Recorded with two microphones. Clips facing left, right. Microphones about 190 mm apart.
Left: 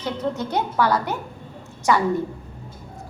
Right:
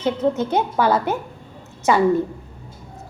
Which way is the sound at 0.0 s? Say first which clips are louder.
Right 6 dB; 20° right (ahead or behind).